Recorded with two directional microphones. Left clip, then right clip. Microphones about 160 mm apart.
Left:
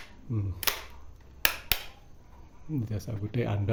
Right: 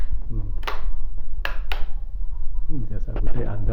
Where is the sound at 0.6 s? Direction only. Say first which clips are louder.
Right 1 dB; 90° left.